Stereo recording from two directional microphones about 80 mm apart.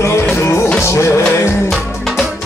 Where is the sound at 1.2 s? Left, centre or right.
Centre.